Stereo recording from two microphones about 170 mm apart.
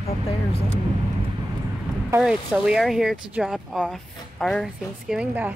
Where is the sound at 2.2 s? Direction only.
5° right (ahead or behind).